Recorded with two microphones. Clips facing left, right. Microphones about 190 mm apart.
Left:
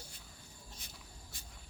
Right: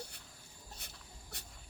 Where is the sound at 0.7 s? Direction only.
65° right (ahead or behind).